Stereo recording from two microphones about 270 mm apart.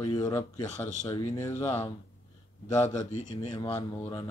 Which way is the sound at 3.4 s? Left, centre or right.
Centre.